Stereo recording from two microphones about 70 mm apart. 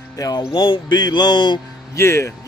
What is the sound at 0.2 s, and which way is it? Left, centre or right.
Speech, left.